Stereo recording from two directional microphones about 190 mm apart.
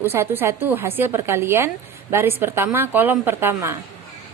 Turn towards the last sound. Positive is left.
turn(degrees=-15)  # may be behind; listen again after turning